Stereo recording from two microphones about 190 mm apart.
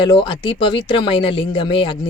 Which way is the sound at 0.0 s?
25° left (ahead or behind).